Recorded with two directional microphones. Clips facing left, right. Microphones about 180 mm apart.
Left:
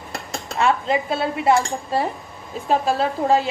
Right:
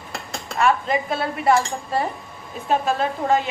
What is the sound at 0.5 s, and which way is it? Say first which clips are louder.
Dishes: even; 25° left (ahead or behind).